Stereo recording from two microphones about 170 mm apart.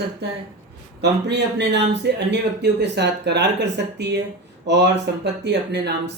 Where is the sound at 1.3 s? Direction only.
90° right.